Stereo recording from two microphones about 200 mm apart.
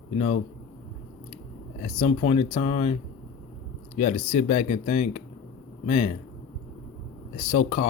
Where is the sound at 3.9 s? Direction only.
30° left (ahead or behind).